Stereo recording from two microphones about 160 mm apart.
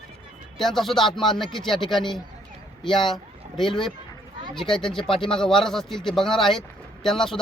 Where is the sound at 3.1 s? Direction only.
Centre (ahead or behind).